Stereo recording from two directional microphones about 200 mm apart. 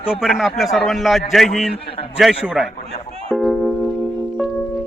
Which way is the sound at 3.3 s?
5° left (ahead or behind).